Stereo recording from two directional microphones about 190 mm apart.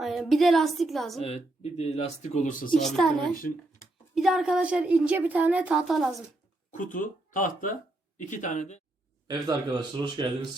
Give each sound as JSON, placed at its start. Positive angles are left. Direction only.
{"t": 0.0, "sound": "a woman's voice", "side_deg": 0}
{"t": 1.2, "sound": "speech", "side_deg": 35}
{"t": 2.8, "sound": "a woman's voice", "side_deg": 0}
{"t": 6.7, "sound": "speech", "side_deg": 45}
{"t": 9.2, "sound": "speech", "side_deg": -20}